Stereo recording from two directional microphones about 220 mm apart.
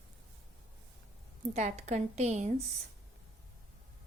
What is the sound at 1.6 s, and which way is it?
Speech, 30° right (ahead or behind).